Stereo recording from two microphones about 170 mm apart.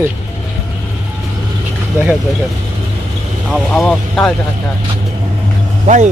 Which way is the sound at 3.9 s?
5° left (ahead or behind).